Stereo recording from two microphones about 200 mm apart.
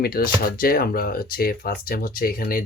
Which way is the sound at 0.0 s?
50° left (ahead or behind).